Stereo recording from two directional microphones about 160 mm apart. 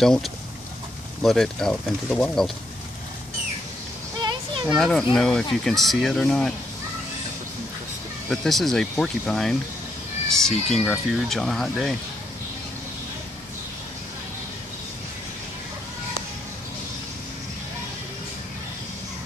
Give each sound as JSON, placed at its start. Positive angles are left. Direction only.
{"t": 0.0, "sound": "speech", "side_deg": 0}
{"t": 4.2, "sound": "a sound", "side_deg": -30}
{"t": 4.7, "sound": "speech", "side_deg": 5}
{"t": 8.3, "sound": "speech", "side_deg": 0}